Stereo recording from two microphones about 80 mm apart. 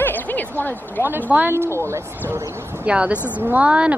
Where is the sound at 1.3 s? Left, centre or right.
Right.